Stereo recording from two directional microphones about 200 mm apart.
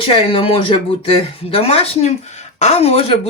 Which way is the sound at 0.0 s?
25° left (ahead or behind).